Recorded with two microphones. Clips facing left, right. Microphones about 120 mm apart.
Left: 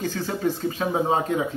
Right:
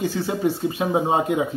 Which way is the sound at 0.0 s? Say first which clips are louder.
Right 3 dB; 10° right (ahead or behind).